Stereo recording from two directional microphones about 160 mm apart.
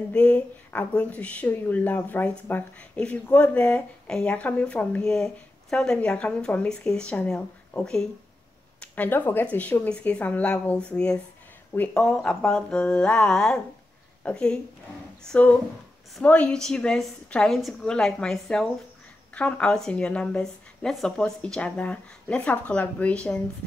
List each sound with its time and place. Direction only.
0.1 s a woman's voice: 10° left (ahead or behind)